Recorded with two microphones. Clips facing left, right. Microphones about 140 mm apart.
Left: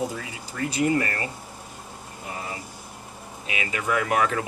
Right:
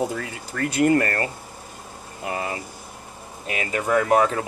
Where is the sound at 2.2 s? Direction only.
80° right.